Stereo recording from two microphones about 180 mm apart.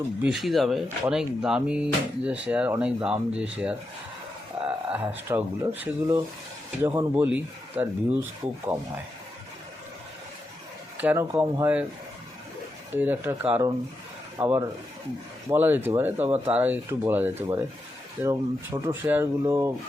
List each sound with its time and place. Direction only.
0.2 s speech: 5° right (ahead or behind)
4.9 s speech: 10° right (ahead or behind)
10.9 s speech: 10° right (ahead or behind)
12.9 s speech: 10° right (ahead or behind)